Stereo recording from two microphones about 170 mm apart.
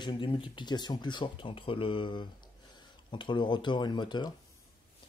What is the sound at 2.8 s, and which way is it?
Speech, 30° left (ahead or behind).